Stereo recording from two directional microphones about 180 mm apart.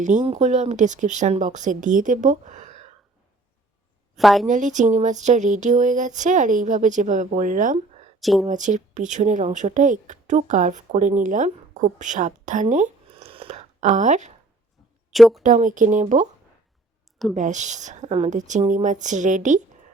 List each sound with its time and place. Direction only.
0.0 s speech: 40° right (ahead or behind)
4.2 s a woman's voice: centre (ahead or behind)
4.4 s speech: 45° right (ahead or behind)
8.2 s a woman's voice: centre (ahead or behind)
8.4 s speech: 45° right (ahead or behind)
13.1 s a sound: 35° right (ahead or behind)
15.1 s a woman's voice: centre (ahead or behind)
15.4 s speech: 45° right (ahead or behind)
17.3 s speech: 40° right (ahead or behind)